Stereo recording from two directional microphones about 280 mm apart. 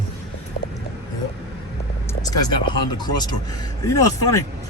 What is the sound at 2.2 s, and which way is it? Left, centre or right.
Speech, centre.